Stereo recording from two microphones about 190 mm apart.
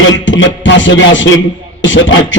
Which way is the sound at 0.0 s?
85° left.